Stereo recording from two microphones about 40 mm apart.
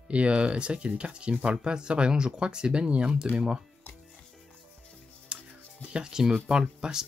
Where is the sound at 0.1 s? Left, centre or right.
Right.